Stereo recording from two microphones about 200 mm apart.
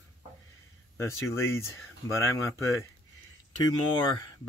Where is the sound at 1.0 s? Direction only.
15° left (ahead or behind).